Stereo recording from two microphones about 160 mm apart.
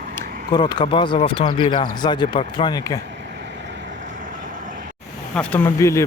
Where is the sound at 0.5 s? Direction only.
30° left (ahead or behind).